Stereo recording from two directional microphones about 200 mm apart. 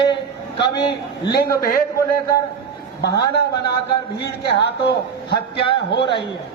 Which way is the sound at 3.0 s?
55° left (ahead or behind).